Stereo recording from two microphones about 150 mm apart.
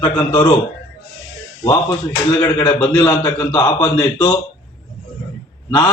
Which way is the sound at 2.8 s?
15° left (ahead or behind).